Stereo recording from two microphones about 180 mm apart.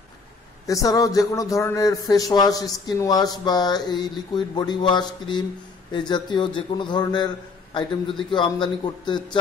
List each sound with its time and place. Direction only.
0.7 s a man's voice: 20° left (ahead or behind)
8.3 s a man's voice: 25° left (ahead or behind)